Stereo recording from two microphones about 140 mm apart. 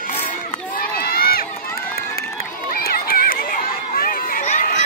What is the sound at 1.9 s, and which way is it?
Crowd, 90° left.